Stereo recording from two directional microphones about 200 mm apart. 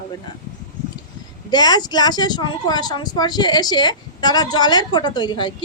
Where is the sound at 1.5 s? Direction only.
20° left (ahead or behind).